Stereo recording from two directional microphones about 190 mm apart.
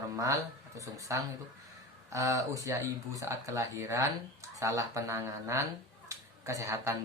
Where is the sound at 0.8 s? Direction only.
15° right (ahead or behind).